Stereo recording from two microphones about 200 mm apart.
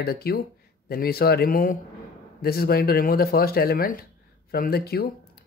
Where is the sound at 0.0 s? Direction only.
50° left (ahead or behind).